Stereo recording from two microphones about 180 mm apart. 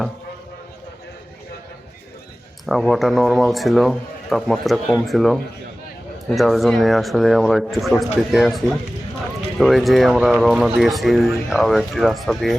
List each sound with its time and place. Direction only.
2.6 s speech: centre (ahead or behind)